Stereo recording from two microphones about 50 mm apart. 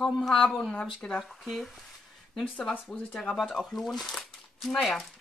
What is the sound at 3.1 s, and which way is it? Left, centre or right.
Speech, centre.